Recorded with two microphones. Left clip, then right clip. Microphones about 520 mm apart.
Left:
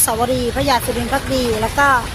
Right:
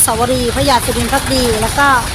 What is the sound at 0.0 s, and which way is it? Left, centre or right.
Speech, left.